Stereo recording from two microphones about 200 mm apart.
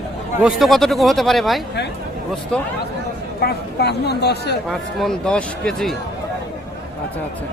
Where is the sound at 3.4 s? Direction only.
55° left (ahead or behind).